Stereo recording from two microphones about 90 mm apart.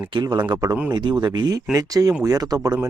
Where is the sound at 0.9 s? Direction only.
55° right (ahead or behind).